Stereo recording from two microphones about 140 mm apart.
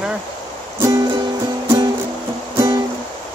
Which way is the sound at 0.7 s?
20° right (ahead or behind).